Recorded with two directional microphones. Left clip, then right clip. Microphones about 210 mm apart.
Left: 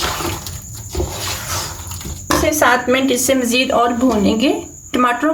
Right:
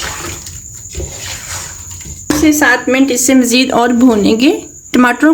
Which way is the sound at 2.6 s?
50° right (ahead or behind).